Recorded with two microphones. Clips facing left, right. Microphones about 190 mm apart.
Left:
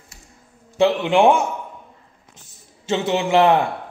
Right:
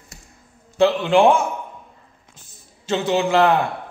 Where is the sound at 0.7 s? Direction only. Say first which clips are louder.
Right 1 dB; 20° left (ahead or behind).